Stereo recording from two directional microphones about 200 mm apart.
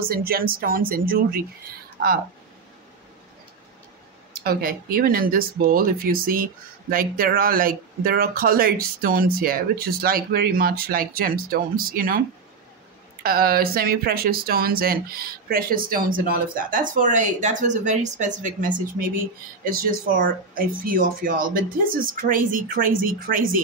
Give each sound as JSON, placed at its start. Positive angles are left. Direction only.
{"t": 0.0, "sound": "speech", "side_deg": -45}
{"t": 4.4, "sound": "speech", "side_deg": -50}
{"t": 13.2, "sound": "speech", "side_deg": -50}